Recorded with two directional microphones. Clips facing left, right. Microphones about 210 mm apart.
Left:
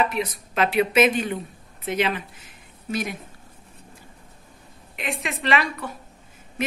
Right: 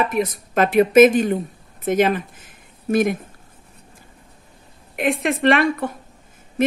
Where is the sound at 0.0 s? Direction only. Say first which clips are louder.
Right 4 dB; 50° right (ahead or behind).